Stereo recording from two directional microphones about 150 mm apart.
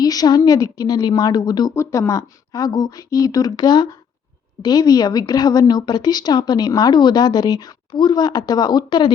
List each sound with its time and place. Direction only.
0.0 s a woman's voice: 25° left (ahead or behind)